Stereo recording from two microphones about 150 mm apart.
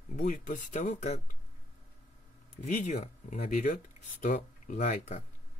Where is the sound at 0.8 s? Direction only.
50° left (ahead or behind).